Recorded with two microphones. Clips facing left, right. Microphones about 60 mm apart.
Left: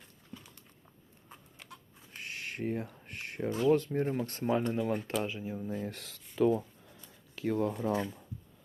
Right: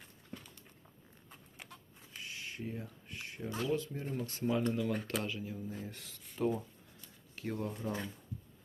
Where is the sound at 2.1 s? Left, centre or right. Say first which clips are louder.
Left 5 dB; left.